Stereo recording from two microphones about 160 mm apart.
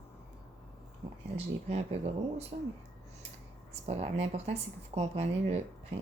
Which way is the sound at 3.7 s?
40° right (ahead or behind).